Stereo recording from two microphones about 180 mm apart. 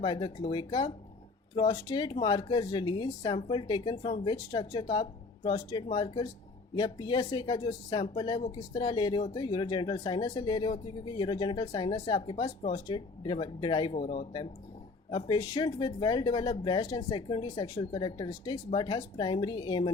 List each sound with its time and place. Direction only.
0.0 s speech: 25° left (ahead or behind)
15.1 s speech: 25° left (ahead or behind)